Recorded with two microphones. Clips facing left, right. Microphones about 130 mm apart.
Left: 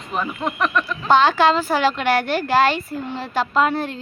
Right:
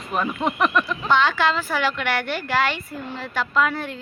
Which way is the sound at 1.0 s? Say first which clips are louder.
Left 6 dB; 35° left (ahead or behind).